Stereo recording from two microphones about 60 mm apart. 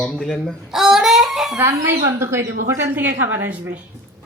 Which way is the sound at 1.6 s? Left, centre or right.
Right.